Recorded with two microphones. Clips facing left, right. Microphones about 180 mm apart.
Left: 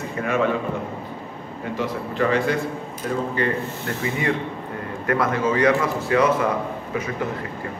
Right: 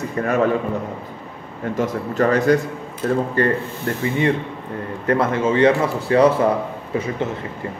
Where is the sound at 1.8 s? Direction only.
45° right (ahead or behind).